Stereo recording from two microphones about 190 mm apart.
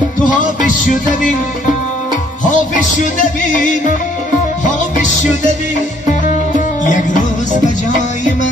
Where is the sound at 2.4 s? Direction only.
40° left (ahead or behind).